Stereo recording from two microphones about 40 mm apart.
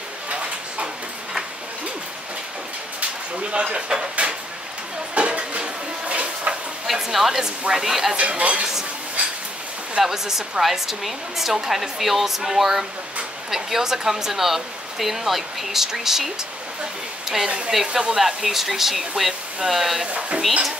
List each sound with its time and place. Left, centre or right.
0.3 s a sound: right
3.5 s speech: right
4.2 s a sound: right
5.1 s dishes: right
6.9 s a woman's voice: centre
8.2 s speech: right
10.0 s a woman's voice: centre
17.6 s a woman's voice: centre
20.2 s speech: right